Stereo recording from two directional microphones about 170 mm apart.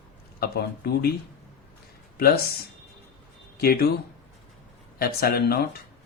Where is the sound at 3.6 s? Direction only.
65° left (ahead or behind).